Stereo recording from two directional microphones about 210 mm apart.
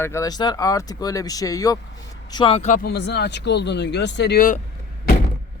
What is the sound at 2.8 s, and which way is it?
Speech, 55° left (ahead or behind).